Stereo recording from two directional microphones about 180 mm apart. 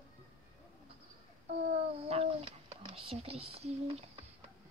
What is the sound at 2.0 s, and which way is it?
Speech, 35° right (ahead or behind).